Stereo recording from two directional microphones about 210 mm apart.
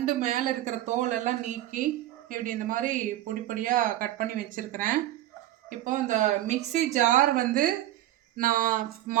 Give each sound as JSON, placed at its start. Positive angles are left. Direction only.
{"t": 0.2, "sound": "speech", "side_deg": -35}